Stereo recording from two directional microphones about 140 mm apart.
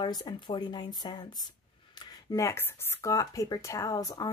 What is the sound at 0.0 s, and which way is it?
Speech, 30° left (ahead or behind).